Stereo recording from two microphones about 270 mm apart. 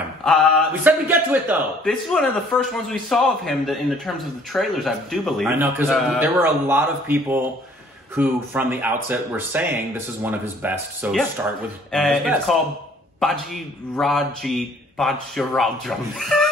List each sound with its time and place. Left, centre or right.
0.2 s speech: centre